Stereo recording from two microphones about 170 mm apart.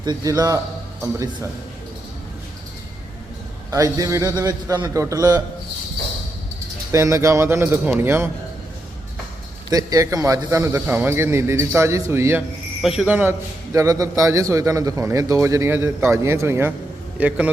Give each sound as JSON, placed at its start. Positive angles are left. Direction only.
{"t": 0.0, "sound": "a man's voice", "side_deg": -20}
{"t": 3.7, "sound": "a man's voice", "side_deg": -20}
{"t": 6.9, "sound": "a man's voice", "side_deg": -15}
{"t": 9.6, "sound": "a man's voice", "side_deg": -20}